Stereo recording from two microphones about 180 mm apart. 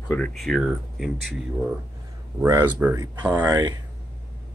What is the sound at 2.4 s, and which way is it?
Speech, 15° right (ahead or behind).